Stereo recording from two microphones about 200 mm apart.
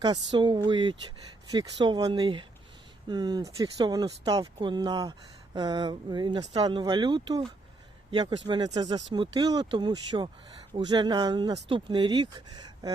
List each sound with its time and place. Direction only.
0.0 s speech: 20° right (ahead or behind)